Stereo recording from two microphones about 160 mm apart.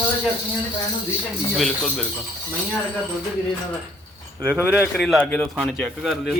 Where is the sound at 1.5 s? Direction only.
Centre (ahead or behind).